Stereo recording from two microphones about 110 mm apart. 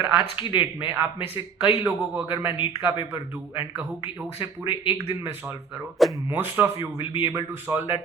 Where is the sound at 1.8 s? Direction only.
20° right (ahead or behind).